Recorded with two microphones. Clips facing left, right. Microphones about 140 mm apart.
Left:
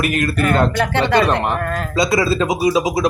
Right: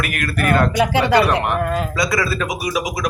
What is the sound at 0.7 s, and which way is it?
Speech, 10° right (ahead or behind).